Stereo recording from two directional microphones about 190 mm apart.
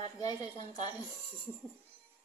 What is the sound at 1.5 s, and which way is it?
Speech, 10° right (ahead or behind).